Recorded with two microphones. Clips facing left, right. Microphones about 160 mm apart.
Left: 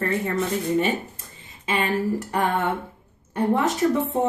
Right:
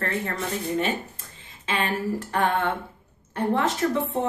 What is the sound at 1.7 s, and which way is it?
A woman's voice, 15° left (ahead or behind).